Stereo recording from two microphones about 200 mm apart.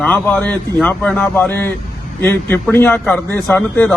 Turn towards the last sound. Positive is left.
turn(degrees=10)  # may be behind; listen again after turning